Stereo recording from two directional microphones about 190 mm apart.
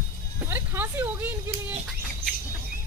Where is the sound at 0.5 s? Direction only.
10° right (ahead or behind).